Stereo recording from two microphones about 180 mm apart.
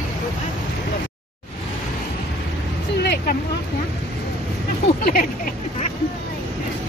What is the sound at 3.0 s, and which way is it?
Vehicle, 60° left (ahead or behind).